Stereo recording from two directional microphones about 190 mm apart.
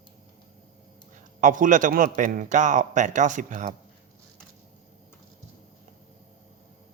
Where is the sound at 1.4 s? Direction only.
45° right (ahead or behind).